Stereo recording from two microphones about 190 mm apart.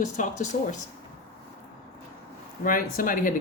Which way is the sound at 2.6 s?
45° left (ahead or behind).